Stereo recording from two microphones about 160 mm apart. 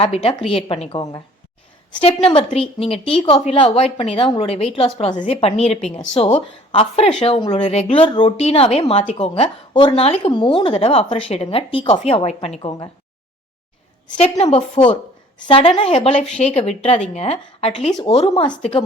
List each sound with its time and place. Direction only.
0.0 s speech: 40° left (ahead or behind)
14.2 s a woman's voice: 40° left (ahead or behind)
15.4 s speech: 30° left (ahead or behind)